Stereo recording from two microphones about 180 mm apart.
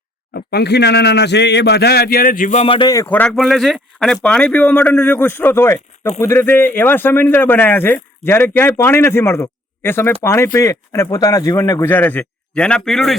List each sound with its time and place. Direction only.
0.3 s speech: 65° left (ahead or behind); by 2.7 s 40° left (ahead or behind)
2.7 s speech: 20° left (ahead or behind); by 13.1 s centre (ahead or behind)